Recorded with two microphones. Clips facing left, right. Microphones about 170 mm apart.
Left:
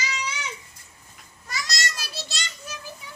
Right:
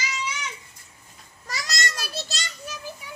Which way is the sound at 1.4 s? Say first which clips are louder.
Right 1 dB; 45° right (ahead or behind).